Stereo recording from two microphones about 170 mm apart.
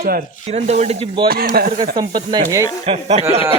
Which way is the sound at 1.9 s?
25° right (ahead or behind).